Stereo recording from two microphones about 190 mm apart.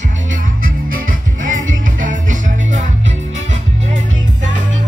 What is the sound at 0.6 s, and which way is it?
Music, 45° right (ahead or behind).